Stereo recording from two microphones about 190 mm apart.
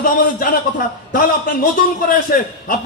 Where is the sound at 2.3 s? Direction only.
50° left (ahead or behind).